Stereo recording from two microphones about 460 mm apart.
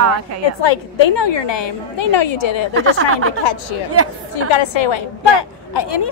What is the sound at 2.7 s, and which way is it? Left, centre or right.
A woman's voice, right.